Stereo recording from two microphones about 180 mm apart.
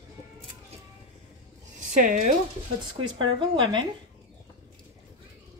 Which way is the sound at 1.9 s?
45° right (ahead or behind).